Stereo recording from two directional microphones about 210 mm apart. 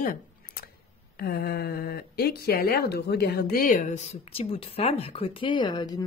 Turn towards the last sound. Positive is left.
turn(degrees=20)  # may be behind; listen again after turning